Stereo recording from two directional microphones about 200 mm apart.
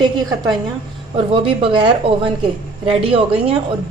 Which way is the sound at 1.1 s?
25° right (ahead or behind).